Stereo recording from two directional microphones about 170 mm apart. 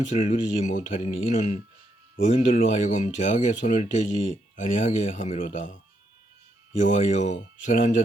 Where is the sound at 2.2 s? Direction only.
50° left (ahead or behind).